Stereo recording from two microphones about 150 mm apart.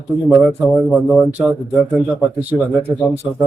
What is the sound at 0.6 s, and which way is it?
Speech, centre (ahead or behind).